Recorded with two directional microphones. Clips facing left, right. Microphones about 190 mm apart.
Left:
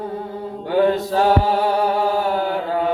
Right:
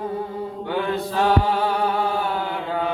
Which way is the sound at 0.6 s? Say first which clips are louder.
Left 8 dB; 40° left (ahead or behind).